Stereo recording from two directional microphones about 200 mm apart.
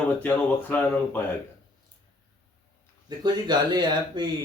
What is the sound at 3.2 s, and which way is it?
Speech, 20° right (ahead or behind).